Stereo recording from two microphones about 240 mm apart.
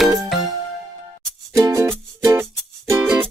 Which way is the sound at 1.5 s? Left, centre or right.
Centre.